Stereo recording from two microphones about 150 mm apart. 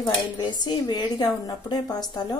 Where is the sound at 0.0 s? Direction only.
30° left (ahead or behind).